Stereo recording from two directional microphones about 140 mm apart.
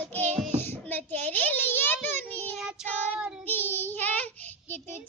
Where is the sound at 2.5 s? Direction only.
Centre (ahead or behind).